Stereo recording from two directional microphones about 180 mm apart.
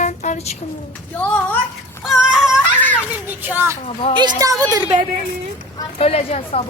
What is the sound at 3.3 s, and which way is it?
Speech, 10° right (ahead or behind).